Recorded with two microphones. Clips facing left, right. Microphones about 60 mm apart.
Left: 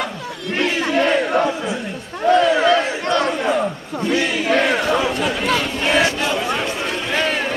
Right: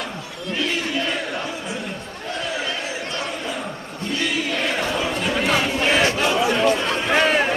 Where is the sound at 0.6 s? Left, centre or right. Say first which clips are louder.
Left 7 dB; left.